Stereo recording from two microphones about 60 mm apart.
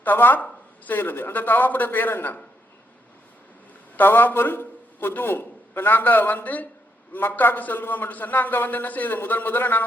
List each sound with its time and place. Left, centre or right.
0.0 s a man's voice: left
3.9 s a man's voice: left